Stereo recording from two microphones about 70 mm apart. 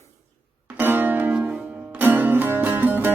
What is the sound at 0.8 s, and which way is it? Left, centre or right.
Music, right.